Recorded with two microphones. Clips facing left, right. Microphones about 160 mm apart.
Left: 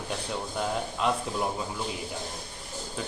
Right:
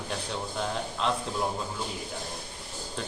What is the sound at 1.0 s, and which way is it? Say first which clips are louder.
Speech: left 2 dB; 10° left (ahead or behind).